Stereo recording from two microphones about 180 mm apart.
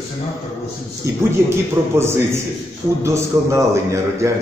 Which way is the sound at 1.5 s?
15° right (ahead or behind).